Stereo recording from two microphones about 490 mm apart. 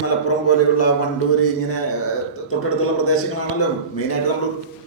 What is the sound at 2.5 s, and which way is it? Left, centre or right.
Speech, left.